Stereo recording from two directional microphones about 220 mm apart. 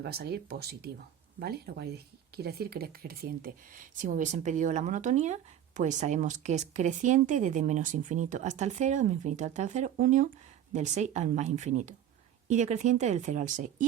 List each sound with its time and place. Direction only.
0.0 s speech: 45° right (ahead or behind)